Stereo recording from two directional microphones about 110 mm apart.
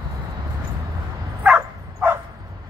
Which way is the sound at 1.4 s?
15° right (ahead or behind).